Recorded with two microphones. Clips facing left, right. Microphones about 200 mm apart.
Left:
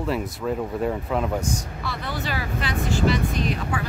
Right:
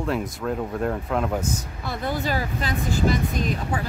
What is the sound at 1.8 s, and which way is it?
Speech, 50° right (ahead or behind).